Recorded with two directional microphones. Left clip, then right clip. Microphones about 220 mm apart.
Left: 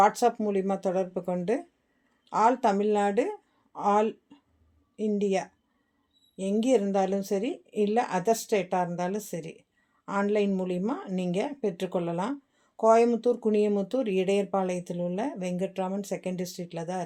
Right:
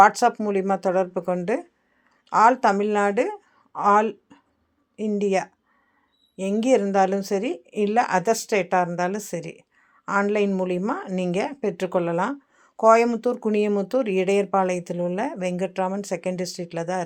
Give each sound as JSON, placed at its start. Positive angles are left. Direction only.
{"t": 0.0, "sound": "a woman's voice", "side_deg": -15}